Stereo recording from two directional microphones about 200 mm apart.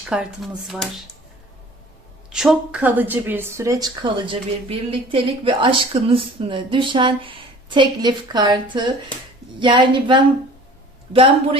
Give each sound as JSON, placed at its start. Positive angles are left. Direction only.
{"t": 0.0, "sound": "speech", "side_deg": -5}
{"t": 2.3, "sound": "a woman's voice", "side_deg": -5}